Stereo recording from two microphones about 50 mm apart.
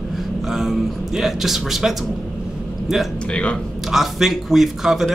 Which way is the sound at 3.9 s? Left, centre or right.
Centre.